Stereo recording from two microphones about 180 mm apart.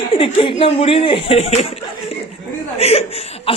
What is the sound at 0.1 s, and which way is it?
Speech, 30° left (ahead or behind).